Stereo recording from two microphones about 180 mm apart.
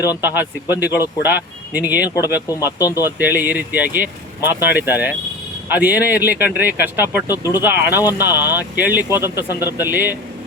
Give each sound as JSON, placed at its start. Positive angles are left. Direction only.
{"t": 0.2, "sound": "speech", "side_deg": -10}
{"t": 2.0, "sound": "speech", "side_deg": 20}
{"t": 3.0, "sound": "speech", "side_deg": -10}
{"t": 9.5, "sound": "speech", "side_deg": 20}
{"t": 9.7, "sound": "speech", "side_deg": -10}